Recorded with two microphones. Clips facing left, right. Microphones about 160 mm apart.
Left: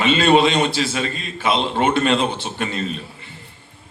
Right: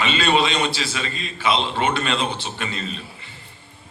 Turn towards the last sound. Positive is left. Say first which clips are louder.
# left 4 dB
turn(degrees=50)  # may be behind; listen again after turning